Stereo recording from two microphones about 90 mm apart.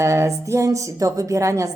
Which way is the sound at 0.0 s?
35° right (ahead or behind).